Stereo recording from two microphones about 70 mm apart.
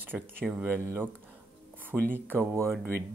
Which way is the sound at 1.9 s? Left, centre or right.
Right.